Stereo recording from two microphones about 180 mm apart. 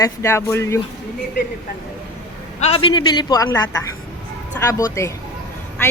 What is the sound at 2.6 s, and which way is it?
A woman's voice, 30° left (ahead or behind).